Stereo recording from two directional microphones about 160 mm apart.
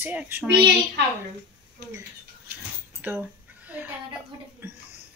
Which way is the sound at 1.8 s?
90° right.